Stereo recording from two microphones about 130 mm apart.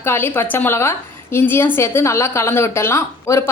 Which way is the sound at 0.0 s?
20° left (ahead or behind).